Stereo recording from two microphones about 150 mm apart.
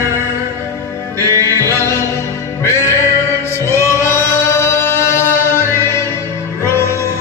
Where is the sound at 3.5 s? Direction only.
20° left (ahead or behind).